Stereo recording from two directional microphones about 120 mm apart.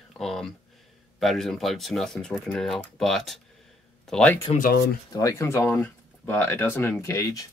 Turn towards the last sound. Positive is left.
turn(degrees=30)  # may be behind; listen again after turning